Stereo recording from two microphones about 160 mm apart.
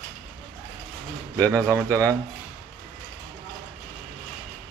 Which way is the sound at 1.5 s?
15° right (ahead or behind).